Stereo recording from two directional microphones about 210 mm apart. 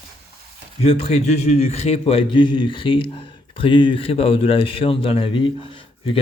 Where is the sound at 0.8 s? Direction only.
30° left (ahead or behind).